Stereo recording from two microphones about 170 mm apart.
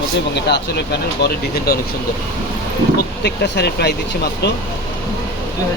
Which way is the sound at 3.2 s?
75° left (ahead or behind).